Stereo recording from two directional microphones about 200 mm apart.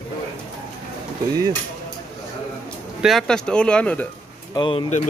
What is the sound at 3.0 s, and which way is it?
Speech, centre (ahead or behind).